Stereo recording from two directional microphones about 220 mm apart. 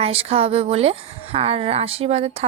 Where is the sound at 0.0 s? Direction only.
25° right (ahead or behind).